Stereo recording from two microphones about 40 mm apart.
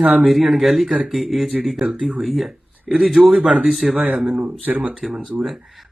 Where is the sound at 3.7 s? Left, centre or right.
Centre.